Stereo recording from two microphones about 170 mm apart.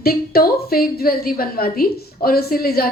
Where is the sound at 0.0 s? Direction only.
60° left (ahead or behind).